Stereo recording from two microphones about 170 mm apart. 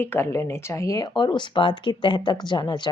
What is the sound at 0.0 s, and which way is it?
Speech, 15° left (ahead or behind).